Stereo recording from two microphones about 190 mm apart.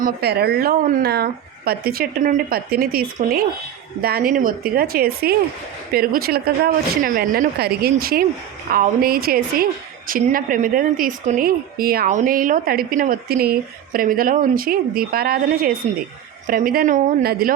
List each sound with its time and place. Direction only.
0.0 s a woman's voice: 55° right (ahead or behind)